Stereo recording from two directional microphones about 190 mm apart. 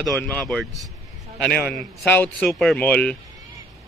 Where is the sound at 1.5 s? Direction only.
55° left (ahead or behind).